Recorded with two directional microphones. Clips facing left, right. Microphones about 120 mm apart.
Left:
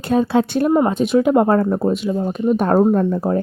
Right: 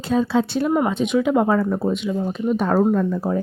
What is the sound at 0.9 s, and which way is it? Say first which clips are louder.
Speech: left 4 dB; 40° left (ahead or behind).